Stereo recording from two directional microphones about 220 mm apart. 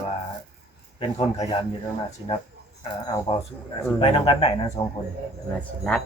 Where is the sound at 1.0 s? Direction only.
25° left (ahead or behind).